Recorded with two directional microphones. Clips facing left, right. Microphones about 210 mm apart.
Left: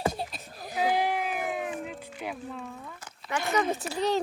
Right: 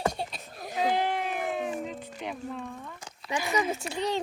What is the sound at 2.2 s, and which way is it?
Speech, centre (ahead or behind).